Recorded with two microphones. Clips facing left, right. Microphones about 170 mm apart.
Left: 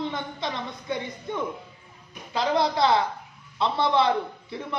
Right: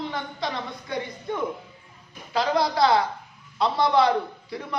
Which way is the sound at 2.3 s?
20° left (ahead or behind).